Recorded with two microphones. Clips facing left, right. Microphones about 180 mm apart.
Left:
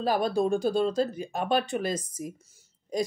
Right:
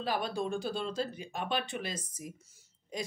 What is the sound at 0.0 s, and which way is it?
Speech, 40° left (ahead or behind).